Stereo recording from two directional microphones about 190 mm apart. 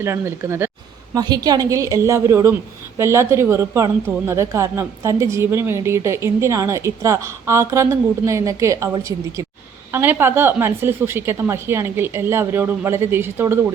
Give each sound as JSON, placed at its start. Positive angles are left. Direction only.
{"t": 0.0, "sound": "a woman's voice", "side_deg": -15}